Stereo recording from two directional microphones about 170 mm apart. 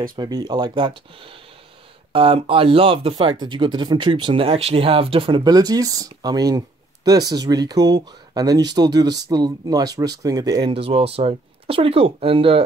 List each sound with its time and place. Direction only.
0.1 s speech: 25° right (ahead or behind)